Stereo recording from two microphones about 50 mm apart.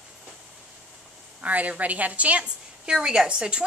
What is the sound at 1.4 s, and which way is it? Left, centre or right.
A woman's voice, right.